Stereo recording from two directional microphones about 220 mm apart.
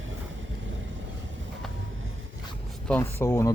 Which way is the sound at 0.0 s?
60° right (ahead or behind).